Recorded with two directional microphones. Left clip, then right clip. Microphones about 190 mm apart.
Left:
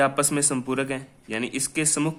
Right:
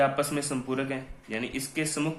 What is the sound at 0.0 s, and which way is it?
Speech, 50° left (ahead or behind).